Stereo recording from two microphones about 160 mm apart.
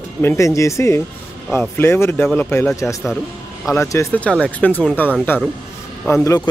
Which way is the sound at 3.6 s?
15° left (ahead or behind).